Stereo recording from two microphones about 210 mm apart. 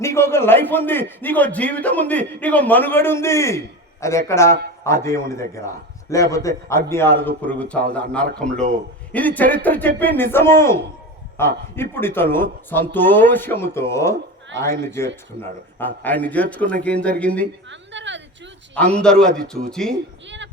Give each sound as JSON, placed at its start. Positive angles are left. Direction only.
{"t": 0.0, "sound": "a man's voice", "side_deg": 10}
{"t": 17.7, "sound": "a sound", "side_deg": -60}
{"t": 18.9, "sound": "a man's voice", "side_deg": 5}
{"t": 19.4, "sound": "speech", "side_deg": -45}
{"t": 19.7, "sound": "a man's voice", "side_deg": 5}
{"t": 20.2, "sound": "a sound", "side_deg": -60}